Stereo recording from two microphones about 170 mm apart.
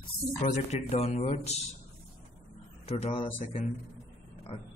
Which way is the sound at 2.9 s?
35° left (ahead or behind).